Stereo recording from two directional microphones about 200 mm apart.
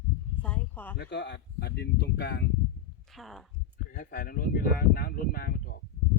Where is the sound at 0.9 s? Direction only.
55° left (ahead or behind).